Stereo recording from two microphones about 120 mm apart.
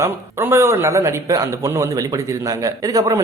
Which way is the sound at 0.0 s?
20° right (ahead or behind).